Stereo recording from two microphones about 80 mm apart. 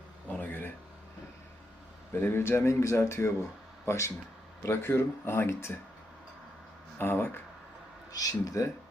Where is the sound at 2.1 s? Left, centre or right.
Left.